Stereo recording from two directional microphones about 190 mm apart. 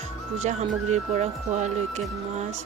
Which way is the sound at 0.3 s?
40° right (ahead or behind).